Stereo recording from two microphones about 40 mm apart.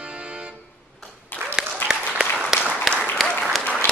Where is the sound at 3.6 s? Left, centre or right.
Left.